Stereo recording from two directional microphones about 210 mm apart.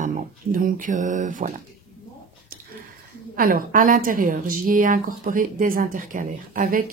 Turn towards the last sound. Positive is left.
turn(degrees=-40)  # may be behind; listen again after turning